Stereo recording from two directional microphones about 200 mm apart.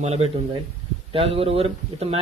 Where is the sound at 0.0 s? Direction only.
30° right (ahead or behind).